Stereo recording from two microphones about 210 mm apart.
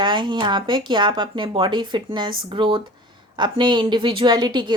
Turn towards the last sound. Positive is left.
turn(degrees=-20)  # may be behind; listen again after turning